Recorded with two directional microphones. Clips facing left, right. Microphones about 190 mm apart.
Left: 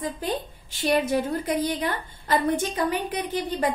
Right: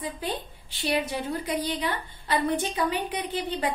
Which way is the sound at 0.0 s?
45° left (ahead or behind).